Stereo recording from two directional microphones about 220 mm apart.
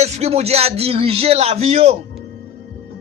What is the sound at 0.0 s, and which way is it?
Speech, 30° right (ahead or behind).